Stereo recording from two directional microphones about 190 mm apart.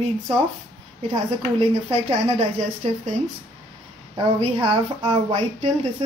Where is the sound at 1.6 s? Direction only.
30° right (ahead or behind).